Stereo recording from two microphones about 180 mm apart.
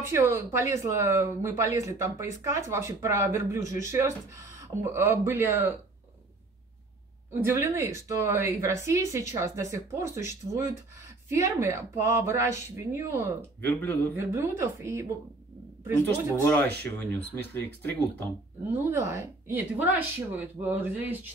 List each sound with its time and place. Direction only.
0.0 s speech: 15° right (ahead or behind)
7.3 s speech: 15° right (ahead or behind)
13.6 s speech: 10° left (ahead or behind)
14.1 s speech: 15° right (ahead or behind)
16.4 s speech: 10° left (ahead or behind)
18.9 s speech: 15° right (ahead or behind)